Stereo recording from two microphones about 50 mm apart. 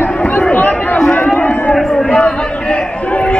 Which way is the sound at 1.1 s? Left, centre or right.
Left.